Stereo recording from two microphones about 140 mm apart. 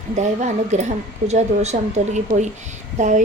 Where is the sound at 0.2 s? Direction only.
55° right (ahead or behind).